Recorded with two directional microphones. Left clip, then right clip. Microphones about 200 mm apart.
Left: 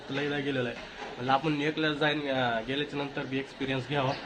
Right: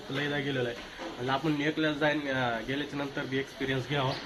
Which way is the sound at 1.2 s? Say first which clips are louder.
Left 2 dB; 5° left (ahead or behind).